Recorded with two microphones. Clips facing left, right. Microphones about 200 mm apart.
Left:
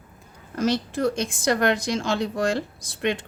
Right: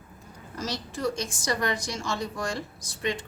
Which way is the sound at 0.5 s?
60° left (ahead or behind).